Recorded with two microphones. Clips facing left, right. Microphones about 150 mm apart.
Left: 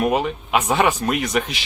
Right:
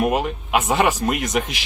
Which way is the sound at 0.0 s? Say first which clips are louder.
Even; 10° right (ahead or behind).